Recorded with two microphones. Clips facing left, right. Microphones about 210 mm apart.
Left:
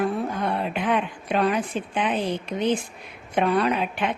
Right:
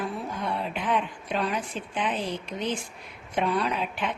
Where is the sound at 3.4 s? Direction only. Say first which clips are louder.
Left 5 dB; 60° left (ahead or behind).